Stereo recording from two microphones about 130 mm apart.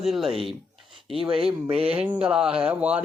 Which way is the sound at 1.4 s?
50° right (ahead or behind).